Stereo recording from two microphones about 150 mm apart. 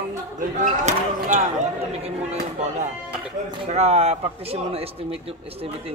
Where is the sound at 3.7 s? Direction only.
45° right (ahead or behind).